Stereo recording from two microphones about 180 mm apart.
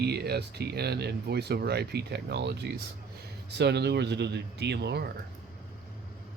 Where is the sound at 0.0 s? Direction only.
65° right (ahead or behind).